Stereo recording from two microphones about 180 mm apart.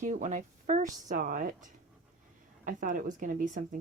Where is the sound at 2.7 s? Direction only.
50° right (ahead or behind).